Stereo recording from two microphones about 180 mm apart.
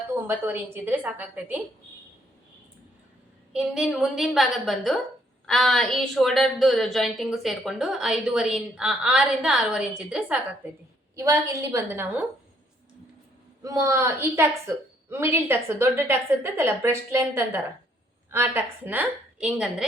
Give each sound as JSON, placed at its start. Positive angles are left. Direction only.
{"t": 0.3, "sound": "a woman's voice", "side_deg": -10}
{"t": 3.5, "sound": "a woman's voice", "side_deg": -5}
{"t": 11.1, "sound": "a woman's voice", "side_deg": -20}
{"t": 13.6, "sound": "a woman's voice", "side_deg": -20}